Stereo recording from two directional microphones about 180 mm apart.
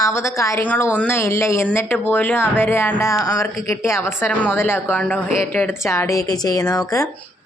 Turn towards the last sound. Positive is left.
turn(degrees=20)  # may be behind; listen again after turning